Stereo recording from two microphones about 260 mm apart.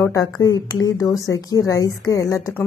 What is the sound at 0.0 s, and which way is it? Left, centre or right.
A woman's voice, centre.